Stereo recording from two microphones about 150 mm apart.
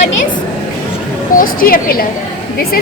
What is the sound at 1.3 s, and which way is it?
Speech, 70° left (ahead or behind).